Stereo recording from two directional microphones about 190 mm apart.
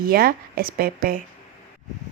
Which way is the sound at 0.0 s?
50° right (ahead or behind).